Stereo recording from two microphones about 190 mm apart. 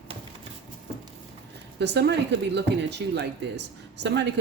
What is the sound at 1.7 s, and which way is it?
Speech, 65° right (ahead or behind).